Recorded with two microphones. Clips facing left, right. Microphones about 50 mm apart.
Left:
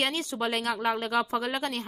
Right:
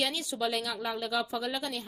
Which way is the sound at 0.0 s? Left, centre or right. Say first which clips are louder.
Left 2 dB; left.